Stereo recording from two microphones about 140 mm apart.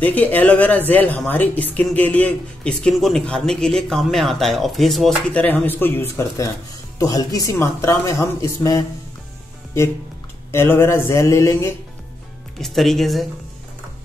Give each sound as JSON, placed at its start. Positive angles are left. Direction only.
{"t": 0.0, "sound": "speech", "side_deg": 10}
{"t": 10.5, "sound": "speech", "side_deg": 20}
{"t": 12.5, "sound": "speech", "side_deg": 0}